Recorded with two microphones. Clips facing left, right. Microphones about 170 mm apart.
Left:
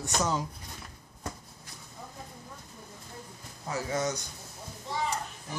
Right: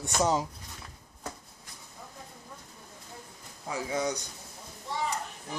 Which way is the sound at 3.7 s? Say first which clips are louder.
Even; 10° right (ahead or behind).